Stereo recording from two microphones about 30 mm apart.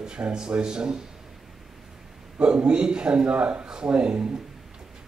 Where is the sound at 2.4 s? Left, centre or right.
Right.